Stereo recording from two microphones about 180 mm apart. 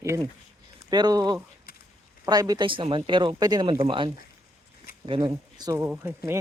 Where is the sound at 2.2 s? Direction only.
20° right (ahead or behind).